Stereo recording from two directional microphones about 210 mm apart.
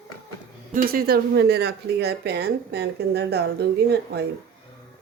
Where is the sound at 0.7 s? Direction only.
40° right (ahead or behind).